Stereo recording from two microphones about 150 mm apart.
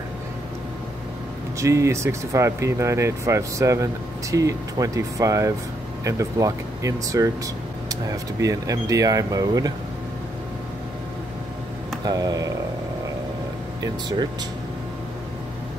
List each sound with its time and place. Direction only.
1.6 s speech: 20° right (ahead or behind)
12.0 s speech: 25° right (ahead or behind)